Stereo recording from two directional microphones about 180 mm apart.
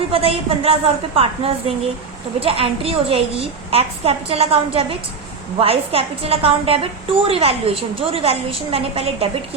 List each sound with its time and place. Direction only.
0.1 s a woman's voice: 35° right (ahead or behind)